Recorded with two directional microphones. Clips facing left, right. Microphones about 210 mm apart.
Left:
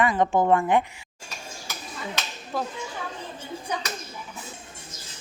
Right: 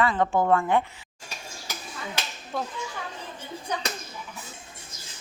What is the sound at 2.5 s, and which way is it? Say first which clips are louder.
Speech: left 2 dB; centre (ahead or behind).